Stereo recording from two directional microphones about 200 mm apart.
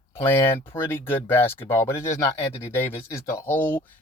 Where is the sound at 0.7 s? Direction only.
10° left (ahead or behind).